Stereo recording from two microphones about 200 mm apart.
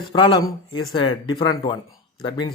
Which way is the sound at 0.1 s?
20° left (ahead or behind).